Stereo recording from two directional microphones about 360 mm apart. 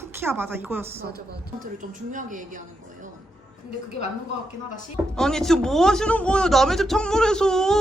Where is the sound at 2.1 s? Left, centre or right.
Right.